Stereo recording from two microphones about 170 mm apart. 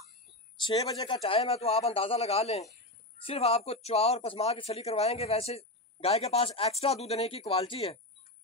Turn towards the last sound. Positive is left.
turn(degrees=35)  # may be behind; listen again after turning